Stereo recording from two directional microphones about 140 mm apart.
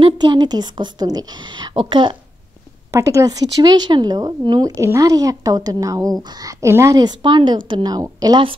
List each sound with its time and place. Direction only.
0.0 s a woman's voice: 30° right (ahead or behind)
2.9 s speech: 20° right (ahead or behind)